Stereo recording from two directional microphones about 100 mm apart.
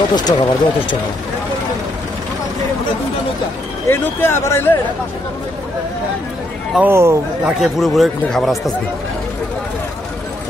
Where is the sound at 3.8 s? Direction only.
25° left (ahead or behind).